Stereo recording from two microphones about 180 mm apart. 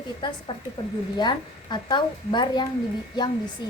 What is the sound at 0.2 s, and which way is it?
A woman's voice, 25° left (ahead or behind).